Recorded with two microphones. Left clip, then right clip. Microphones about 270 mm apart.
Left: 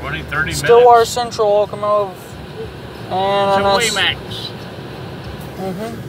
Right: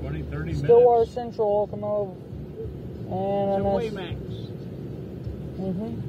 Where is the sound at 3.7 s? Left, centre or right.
Left.